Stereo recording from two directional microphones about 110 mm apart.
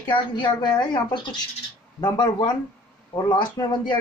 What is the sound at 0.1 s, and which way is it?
Speech, 40° left (ahead or behind).